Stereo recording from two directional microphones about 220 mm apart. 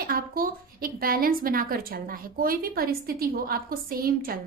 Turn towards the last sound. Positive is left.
turn(degrees=-40)  # may be behind; listen again after turning